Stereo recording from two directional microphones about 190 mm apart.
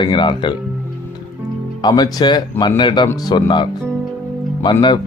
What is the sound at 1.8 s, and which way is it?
Speech, 20° left (ahead or behind).